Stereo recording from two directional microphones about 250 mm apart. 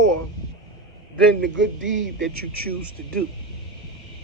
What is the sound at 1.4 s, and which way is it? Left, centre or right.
Speech, right.